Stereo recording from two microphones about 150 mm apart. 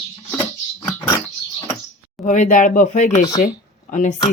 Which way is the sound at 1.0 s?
15° left (ahead or behind).